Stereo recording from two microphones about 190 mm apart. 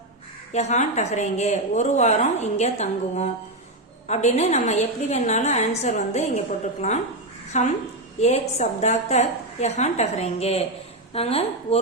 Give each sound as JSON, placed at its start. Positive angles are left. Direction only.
{"t": 0.5, "sound": "a woman's voice", "side_deg": 35}
{"t": 7.5, "sound": "a woman's voice", "side_deg": 35}